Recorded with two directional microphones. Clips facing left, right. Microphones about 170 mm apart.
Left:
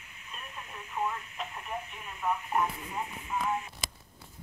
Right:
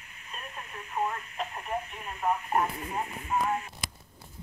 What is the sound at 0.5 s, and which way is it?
Radio, 50° right (ahead or behind).